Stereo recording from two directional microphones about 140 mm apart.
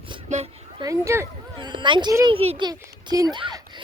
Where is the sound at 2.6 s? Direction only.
30° right (ahead or behind).